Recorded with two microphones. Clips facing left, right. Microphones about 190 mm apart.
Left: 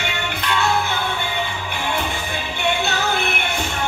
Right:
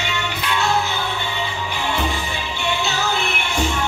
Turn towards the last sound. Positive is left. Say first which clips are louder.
# left 1 dB
turn(degrees=55)  # may be behind; listen again after turning